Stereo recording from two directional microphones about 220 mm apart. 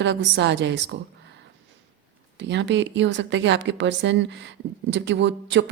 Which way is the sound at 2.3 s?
55° right (ahead or behind).